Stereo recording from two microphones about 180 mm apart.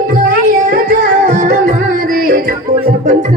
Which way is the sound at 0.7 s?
50° right (ahead or behind).